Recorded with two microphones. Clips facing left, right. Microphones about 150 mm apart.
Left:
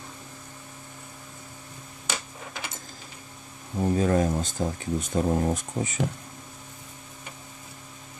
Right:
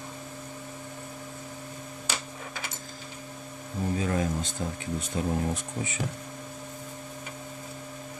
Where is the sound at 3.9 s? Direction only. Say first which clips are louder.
Left 5 dB; 45° left (ahead or behind).